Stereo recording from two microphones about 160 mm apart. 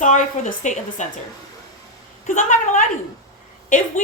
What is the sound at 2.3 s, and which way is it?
Speech, 50° left (ahead or behind).